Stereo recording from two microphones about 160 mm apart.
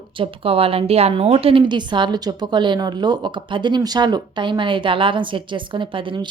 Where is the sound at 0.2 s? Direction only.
35° right (ahead or behind).